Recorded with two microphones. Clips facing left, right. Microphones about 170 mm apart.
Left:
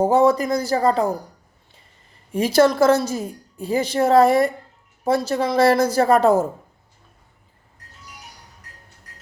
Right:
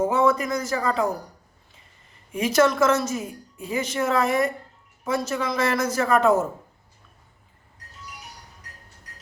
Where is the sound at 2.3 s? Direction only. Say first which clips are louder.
Left 4 dB; 35° left (ahead or behind).